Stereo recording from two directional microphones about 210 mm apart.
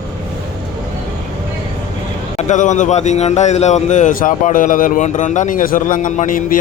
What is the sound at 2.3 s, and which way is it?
A man's voice, 35° left (ahead or behind).